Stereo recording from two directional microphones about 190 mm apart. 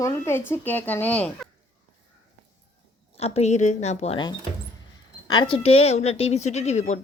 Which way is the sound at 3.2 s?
35° left (ahead or behind).